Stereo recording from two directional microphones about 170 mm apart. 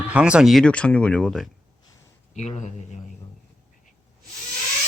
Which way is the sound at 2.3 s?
45° left (ahead or behind).